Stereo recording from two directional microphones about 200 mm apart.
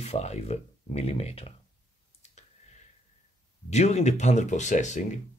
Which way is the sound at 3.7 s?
35° left (ahead or behind).